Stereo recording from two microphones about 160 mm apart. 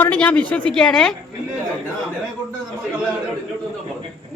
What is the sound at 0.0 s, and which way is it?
A woman's voice, 10° left (ahead or behind).